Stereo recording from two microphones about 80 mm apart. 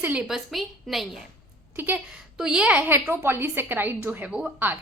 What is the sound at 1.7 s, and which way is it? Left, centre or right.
Speech, right.